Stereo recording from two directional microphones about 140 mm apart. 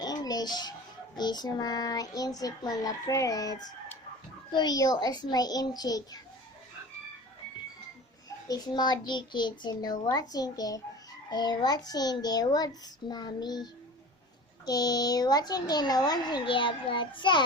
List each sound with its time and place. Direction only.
0.0 s music: 30° left (ahead or behind)
1.1 s speech: 30° left (ahead or behind)
8.4 s speech: 25° left (ahead or behind)